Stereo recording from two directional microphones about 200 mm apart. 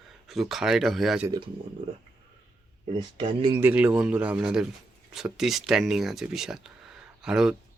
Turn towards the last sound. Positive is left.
turn(degrees=-5)  # may be behind; listen again after turning